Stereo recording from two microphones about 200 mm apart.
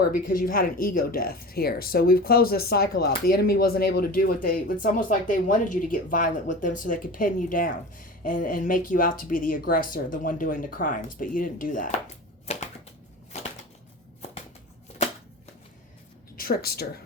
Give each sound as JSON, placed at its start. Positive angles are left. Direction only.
{"t": 0.3, "sound": "speech", "side_deg": 45}
{"t": 12.5, "sound": "typewriter", "side_deg": 30}
{"t": 16.3, "sound": "speech", "side_deg": 45}